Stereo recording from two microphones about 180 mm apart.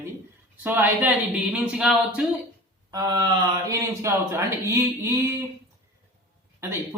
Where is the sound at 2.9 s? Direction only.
20° right (ahead or behind).